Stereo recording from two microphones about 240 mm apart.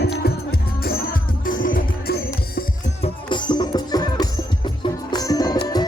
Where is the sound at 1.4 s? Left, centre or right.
Left.